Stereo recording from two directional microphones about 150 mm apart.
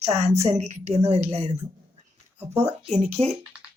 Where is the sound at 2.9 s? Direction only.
45° right (ahead or behind).